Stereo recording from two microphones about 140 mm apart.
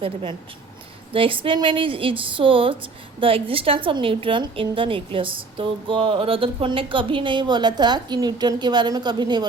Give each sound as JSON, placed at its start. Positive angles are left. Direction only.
{"t": 0.0, "sound": "a woman's voice", "side_deg": -40}